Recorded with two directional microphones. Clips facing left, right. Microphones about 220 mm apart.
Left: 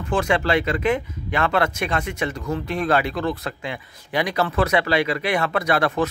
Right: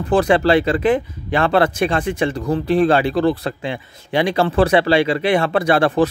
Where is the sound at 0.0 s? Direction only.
35° right (ahead or behind).